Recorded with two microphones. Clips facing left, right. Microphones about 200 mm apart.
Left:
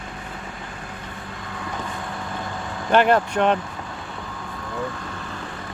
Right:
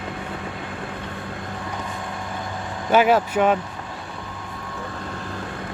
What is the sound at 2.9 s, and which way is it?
Speech, 5° right (ahead or behind).